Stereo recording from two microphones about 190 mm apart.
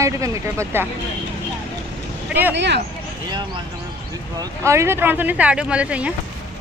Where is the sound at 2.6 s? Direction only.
65° right (ahead or behind).